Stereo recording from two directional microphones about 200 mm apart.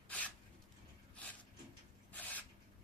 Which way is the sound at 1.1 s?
5° left (ahead or behind).